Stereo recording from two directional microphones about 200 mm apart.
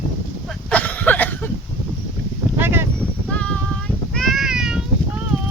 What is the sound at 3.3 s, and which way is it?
Female singing, 5° left (ahead or behind).